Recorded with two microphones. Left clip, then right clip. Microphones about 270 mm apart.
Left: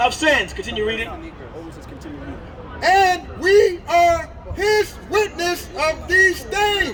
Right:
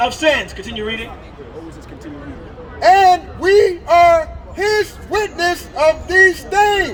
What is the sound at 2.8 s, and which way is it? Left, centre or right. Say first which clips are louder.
A man's voice: right 6 dB; centre.